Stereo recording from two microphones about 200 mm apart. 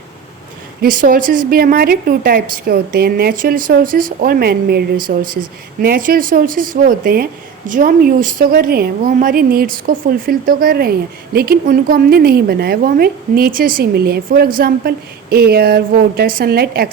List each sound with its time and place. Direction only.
0.8 s a woman's voice: 45° right (ahead or behind)